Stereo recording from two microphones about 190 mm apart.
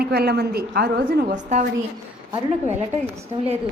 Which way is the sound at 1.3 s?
40° right (ahead or behind).